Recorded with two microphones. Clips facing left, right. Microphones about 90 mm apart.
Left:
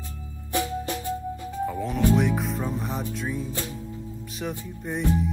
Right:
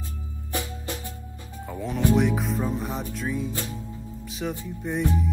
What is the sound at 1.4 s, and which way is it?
Music, 20° left (ahead or behind).